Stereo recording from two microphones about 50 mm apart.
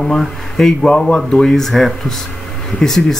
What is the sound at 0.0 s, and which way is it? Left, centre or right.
Speech, centre.